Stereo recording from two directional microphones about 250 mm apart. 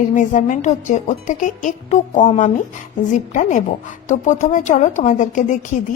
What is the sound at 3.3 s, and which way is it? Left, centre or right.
A woman's voice, left.